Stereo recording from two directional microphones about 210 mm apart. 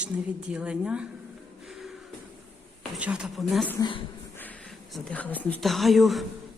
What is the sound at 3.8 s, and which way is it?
Speech, 25° left (ahead or behind).